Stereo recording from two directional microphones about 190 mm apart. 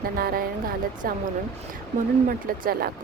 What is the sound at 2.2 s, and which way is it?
Speech, 50° right (ahead or behind).